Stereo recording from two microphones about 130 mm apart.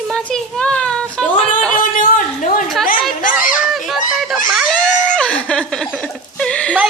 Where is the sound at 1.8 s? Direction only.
90° left.